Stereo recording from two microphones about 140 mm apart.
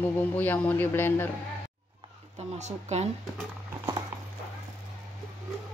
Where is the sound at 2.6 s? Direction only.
55° right (ahead or behind).